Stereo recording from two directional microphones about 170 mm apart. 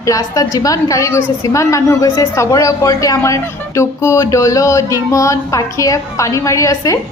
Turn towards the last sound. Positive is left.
turn(degrees=20)  # may be behind; listen again after turning